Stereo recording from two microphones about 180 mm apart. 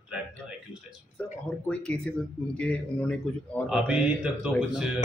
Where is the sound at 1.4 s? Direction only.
5° left (ahead or behind).